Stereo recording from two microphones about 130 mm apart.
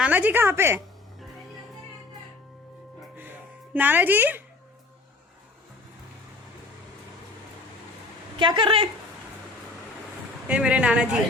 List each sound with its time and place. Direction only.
0.0 s a woman's voice: 10° right (ahead or behind)
3.8 s a woman's voice: 15° right (ahead or behind)
8.4 s a woman's voice: 40° right (ahead or behind)
10.5 s a woman's voice: 10° right (ahead or behind)